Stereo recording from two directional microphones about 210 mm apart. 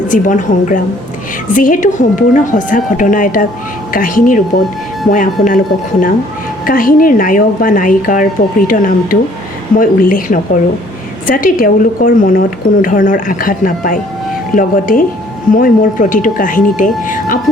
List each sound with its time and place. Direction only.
0.1 s a woman's voice: 40° left (ahead or behind)
6.7 s a woman's voice: 40° left (ahead or behind)